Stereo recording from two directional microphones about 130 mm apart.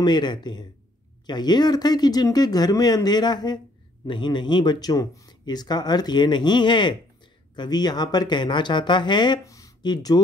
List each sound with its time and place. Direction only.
0.0 s speech: 35° left (ahead or behind)